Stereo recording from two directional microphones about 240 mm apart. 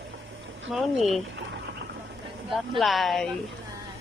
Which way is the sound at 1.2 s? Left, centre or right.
Right.